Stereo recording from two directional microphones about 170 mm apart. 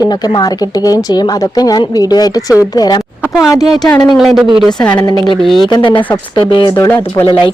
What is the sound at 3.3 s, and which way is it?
Speech, centre (ahead or behind).